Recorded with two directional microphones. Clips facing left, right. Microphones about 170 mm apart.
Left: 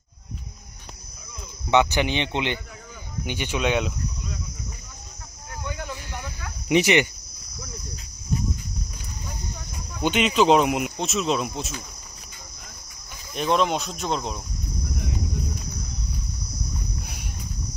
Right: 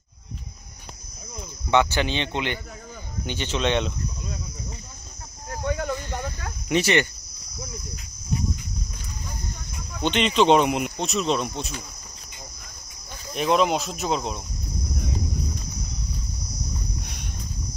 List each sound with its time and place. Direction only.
1.7 s speech: 15° left (ahead or behind)
5.5 s a sound: 40° right (ahead or behind)
5.9 s snake: 55° right (ahead or behind)
6.7 s speech: 15° left (ahead or behind)
9.9 s speech: 5° left (ahead or behind)
13.3 s speech: centre (ahead or behind)
17.0 s cricket: 5° left (ahead or behind)